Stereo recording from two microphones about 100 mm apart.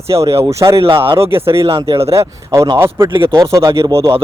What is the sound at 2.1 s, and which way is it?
A man's voice, 30° right (ahead or behind).